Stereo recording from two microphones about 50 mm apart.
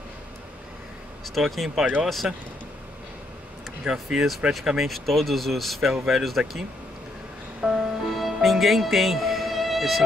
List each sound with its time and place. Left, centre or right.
1.3 s speech: centre
2.2 s speech: centre
3.8 s speech: centre
7.6 s music: centre